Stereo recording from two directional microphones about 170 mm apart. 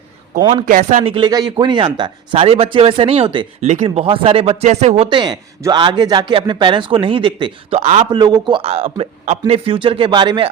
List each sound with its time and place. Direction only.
0.5 s speech: 55° right (ahead or behind)
1.0 s speech: 30° right (ahead or behind)
7.8 s speech: 40° right (ahead or behind)
8.1 s a man's voice: 25° right (ahead or behind)